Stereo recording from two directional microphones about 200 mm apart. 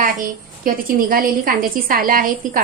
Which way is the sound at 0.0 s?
45° right (ahead or behind).